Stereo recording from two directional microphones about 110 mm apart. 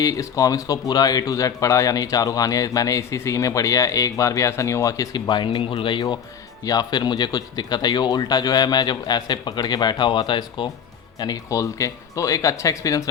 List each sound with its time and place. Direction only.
0.0 s speech: 30° left (ahead or behind)